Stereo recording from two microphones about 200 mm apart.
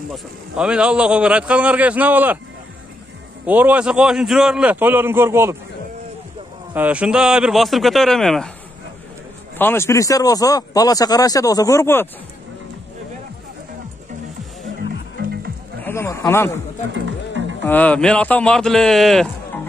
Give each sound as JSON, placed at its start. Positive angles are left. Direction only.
{"t": 0.1, "sound": "a man's voice", "side_deg": -5}
{"t": 3.4, "sound": "a man's voice", "side_deg": -10}
{"t": 6.7, "sound": "a man's voice", "side_deg": -5}
{"t": 9.6, "sound": "speech", "side_deg": 10}
{"t": 15.2, "sound": "music", "side_deg": -50}
{"t": 15.8, "sound": "speech", "side_deg": 10}
{"t": 16.9, "sound": "music", "side_deg": -70}
{"t": 17.6, "sound": "a man's voice", "side_deg": 5}